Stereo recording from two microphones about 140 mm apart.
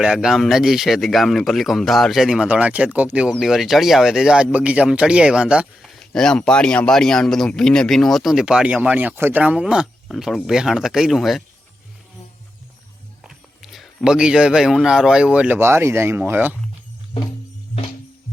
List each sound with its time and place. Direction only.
0.0 s speech: 5° right (ahead or behind)
13.2 s speech: centre (ahead or behind)